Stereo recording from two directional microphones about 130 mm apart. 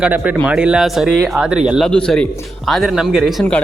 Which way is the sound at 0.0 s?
10° right (ahead or behind).